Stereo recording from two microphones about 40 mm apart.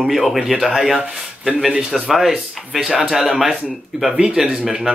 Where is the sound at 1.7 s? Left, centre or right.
Right.